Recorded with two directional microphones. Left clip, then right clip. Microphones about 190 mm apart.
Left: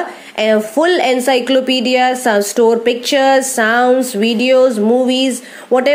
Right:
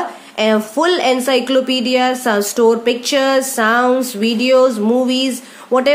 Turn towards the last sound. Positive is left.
turn(degrees=15)  # may be behind; listen again after turning